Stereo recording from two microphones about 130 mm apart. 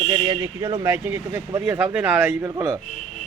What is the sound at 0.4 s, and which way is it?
Speech, 25° right (ahead or behind).